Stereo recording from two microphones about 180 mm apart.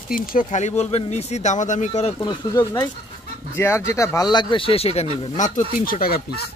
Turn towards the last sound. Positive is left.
turn(degrees=55)  # may be behind; listen again after turning